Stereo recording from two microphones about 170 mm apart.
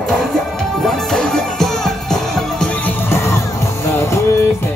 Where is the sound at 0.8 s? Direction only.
Centre (ahead or behind); by 4.2 s 15° left (ahead or behind).